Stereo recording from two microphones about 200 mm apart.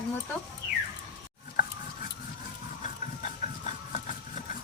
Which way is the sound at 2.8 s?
40° left (ahead or behind).